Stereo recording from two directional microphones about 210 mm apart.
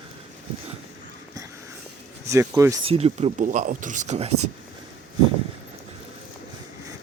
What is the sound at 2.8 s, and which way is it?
Speech, 30° right (ahead or behind).